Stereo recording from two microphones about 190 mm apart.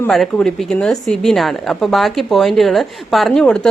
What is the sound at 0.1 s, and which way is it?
A woman's voice, centre (ahead or behind).